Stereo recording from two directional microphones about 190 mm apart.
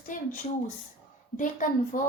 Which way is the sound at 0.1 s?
45° left (ahead or behind).